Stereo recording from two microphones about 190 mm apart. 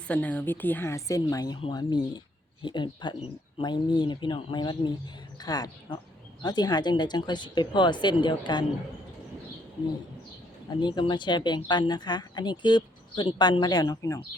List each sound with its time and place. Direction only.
0.1 s speech: 10° left (ahead or behind); by 8.6 s 25° left (ahead or behind)
10.8 s speech: 25° left (ahead or behind)